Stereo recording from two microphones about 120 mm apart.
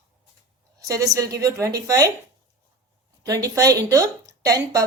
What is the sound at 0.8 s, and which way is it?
A woman's voice, 30° right (ahead or behind).